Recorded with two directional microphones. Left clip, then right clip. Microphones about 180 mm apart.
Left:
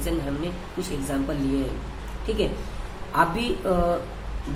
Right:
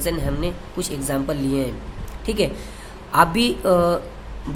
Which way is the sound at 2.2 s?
55° right (ahead or behind).